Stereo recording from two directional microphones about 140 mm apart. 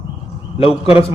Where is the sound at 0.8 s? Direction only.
40° left (ahead or behind).